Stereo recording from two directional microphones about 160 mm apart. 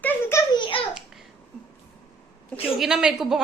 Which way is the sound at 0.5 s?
30° left (ahead or behind).